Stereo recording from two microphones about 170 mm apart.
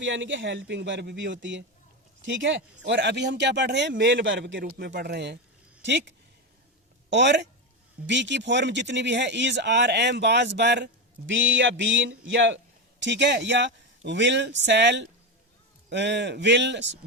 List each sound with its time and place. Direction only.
0.0 s speech: 90° right
4.9 s speech: 70° right (ahead or behind)
5.8 s speech: 90° right